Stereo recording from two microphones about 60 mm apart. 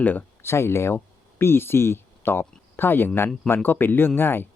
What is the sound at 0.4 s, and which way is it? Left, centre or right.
Speech, left.